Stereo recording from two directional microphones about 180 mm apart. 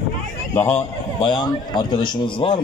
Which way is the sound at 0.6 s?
10° left (ahead or behind).